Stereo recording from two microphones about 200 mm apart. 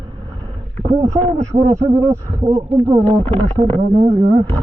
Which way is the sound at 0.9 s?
30° right (ahead or behind).